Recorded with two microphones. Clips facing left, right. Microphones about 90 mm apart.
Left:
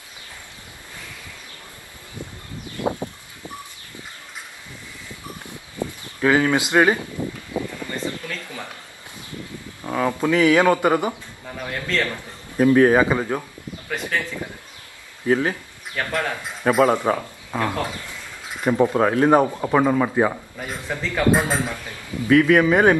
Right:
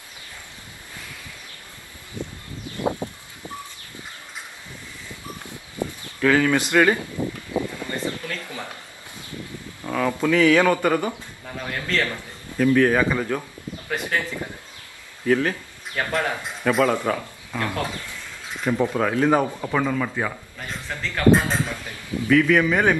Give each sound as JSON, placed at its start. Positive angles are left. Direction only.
{"t": 2.7, "sound": "a sound", "side_deg": -20}
{"t": 6.0, "sound": "speech", "side_deg": 20}
{"t": 7.5, "sound": "a sound", "side_deg": -25}
{"t": 9.8, "sound": "a man's voice", "side_deg": 15}
{"t": 13.8, "sound": "a man's voice", "side_deg": -5}
{"t": 15.2, "sound": "a man's voice", "side_deg": 20}
{"t": 16.0, "sound": "speech", "side_deg": -15}
{"t": 16.6, "sound": "a man's voice", "side_deg": 20}
{"t": 20.5, "sound": "a man's voice", "side_deg": 10}